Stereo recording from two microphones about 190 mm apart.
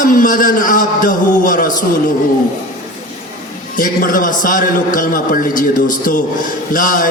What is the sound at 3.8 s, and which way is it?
A man's voice, 45° left (ahead or behind).